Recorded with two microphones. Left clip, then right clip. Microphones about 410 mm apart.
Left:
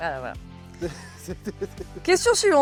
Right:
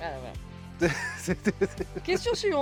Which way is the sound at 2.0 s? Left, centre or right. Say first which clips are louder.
Left 8 dB; left.